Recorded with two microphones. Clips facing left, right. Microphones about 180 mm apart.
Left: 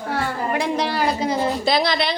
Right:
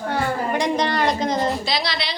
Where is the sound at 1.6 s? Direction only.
50° left (ahead or behind).